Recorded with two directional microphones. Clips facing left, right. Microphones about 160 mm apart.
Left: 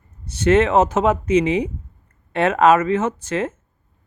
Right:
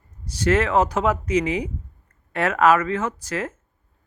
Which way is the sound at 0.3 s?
25° left (ahead or behind).